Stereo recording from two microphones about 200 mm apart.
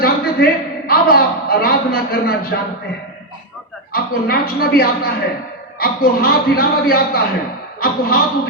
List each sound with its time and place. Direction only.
0.0 s a man's voice: 50° left (ahead or behind)
3.9 s a man's voice: 50° left (ahead or behind)